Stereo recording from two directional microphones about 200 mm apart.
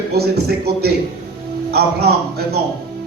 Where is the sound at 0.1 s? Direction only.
55° right (ahead or behind).